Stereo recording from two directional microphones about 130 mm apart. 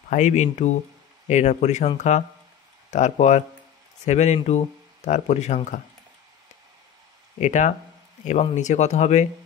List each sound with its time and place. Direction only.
0.1 s speech: 65° left (ahead or behind)
7.3 s speech: 65° left (ahead or behind)